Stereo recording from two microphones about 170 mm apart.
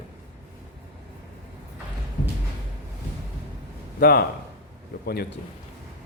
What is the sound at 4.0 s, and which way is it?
A man's voice, 60° left (ahead or behind).